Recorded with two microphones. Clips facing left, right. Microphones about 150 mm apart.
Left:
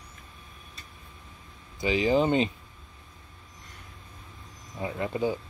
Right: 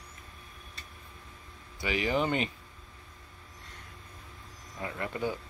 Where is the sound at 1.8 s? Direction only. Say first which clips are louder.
Left 6 dB; 25° left (ahead or behind).